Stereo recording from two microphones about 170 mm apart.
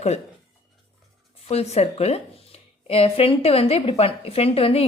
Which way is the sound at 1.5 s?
40° left (ahead or behind).